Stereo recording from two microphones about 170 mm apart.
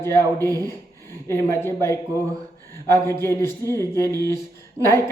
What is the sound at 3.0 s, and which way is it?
Speech, 15° left (ahead or behind).